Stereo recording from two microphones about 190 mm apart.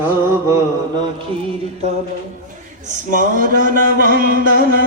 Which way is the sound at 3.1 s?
45° right (ahead or behind).